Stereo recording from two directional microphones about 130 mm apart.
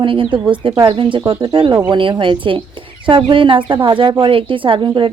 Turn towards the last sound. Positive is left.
turn(degrees=-35)  # may be behind; listen again after turning